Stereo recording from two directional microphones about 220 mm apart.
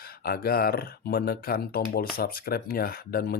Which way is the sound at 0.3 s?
45° left (ahead or behind).